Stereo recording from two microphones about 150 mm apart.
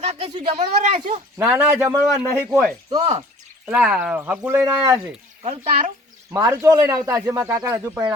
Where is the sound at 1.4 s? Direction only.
10° right (ahead or behind).